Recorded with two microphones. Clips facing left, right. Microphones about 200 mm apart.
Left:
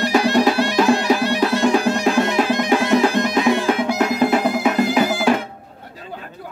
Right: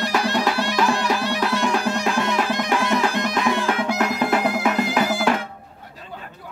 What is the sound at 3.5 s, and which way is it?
Music, 5° left (ahead or behind).